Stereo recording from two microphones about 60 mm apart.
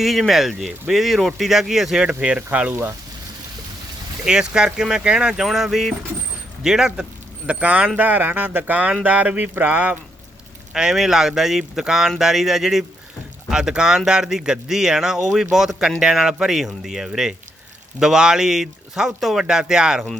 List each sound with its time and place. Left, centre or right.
0.0 s speech: centre
2.2 s speech: right
4.3 s speech: centre
7.6 s speech: right
10.8 s speech: centre